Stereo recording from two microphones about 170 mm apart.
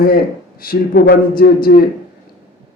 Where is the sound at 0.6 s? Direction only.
65° left (ahead or behind).